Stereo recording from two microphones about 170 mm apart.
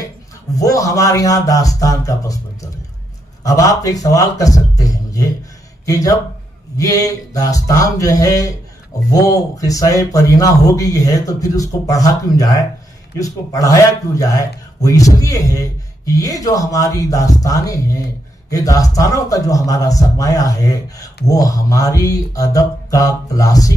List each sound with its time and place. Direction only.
0.6 s a man's voice: 20° left (ahead or behind)